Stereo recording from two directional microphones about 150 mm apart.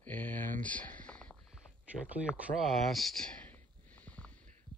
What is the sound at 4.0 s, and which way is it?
Heart sounds, 10° left (ahead or behind).